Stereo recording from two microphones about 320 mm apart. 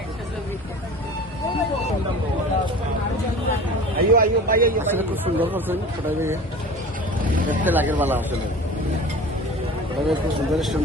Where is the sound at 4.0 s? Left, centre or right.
Right.